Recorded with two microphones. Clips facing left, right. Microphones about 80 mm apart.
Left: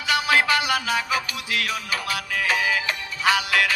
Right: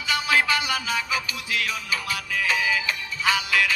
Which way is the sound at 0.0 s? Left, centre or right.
Left.